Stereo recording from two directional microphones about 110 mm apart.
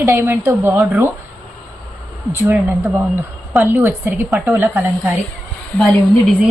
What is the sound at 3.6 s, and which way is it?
Speech, 15° right (ahead or behind).